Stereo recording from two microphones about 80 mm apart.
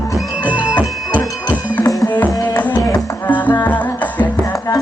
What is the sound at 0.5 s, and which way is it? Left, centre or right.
Music, left.